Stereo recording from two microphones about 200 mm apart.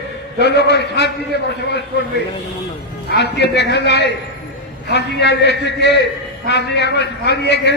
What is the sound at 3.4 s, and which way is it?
A man's voice, 55° left (ahead or behind).